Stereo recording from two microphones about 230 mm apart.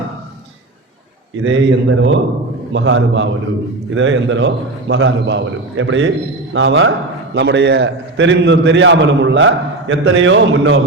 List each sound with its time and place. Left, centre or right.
1.5 s a man's voice: right